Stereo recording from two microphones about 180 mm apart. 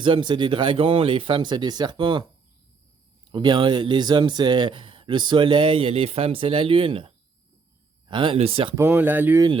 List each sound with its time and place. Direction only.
0.0 s speech: 25° right (ahead or behind)
3.3 s speech: 25° right (ahead or behind)
8.7 s speech: 10° right (ahead or behind)